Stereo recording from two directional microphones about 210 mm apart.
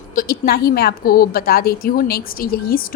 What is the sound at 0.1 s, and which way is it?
Speech, 45° left (ahead or behind).